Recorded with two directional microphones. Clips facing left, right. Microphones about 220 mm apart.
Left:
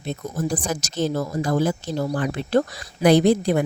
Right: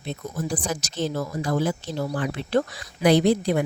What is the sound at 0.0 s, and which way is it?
A woman's voice, 45° left (ahead or behind).